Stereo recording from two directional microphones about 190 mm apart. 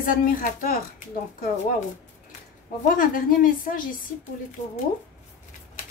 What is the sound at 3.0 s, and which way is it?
Speech, 50° left (ahead or behind).